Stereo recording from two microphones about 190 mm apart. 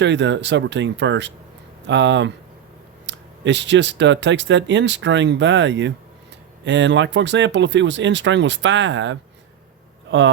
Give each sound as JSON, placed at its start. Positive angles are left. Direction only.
{"t": 0.0, "sound": "speech", "side_deg": -70}